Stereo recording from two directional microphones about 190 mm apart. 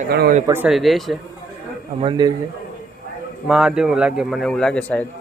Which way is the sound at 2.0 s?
25° right (ahead or behind).